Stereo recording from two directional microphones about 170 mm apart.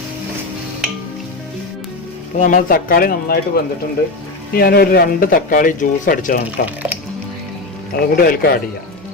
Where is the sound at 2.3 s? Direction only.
50° left (ahead or behind).